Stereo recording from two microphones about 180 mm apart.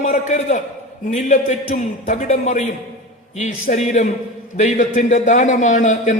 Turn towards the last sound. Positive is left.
turn(degrees=45)  # may be behind; listen again after turning